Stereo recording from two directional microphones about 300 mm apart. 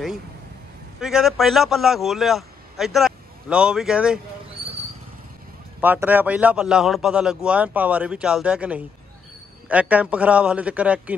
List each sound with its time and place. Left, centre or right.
1.0 s a man's voice: centre
4.6 s vehicle: centre
5.8 s a man's voice: centre